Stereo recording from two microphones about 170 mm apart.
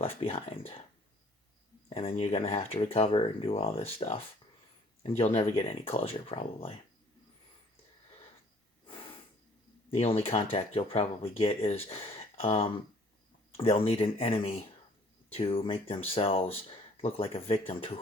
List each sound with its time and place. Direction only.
0.2 s speech: 35° left (ahead or behind)
1.9 s speech: 35° left (ahead or behind)
9.9 s speech: 35° left (ahead or behind)